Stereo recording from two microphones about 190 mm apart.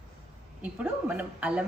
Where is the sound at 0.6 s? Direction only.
5° right (ahead or behind).